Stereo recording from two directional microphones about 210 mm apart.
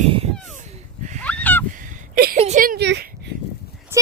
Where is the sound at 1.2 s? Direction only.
5° left (ahead or behind).